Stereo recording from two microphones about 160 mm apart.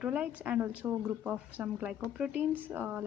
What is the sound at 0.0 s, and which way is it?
A woman's voice, 5° right (ahead or behind).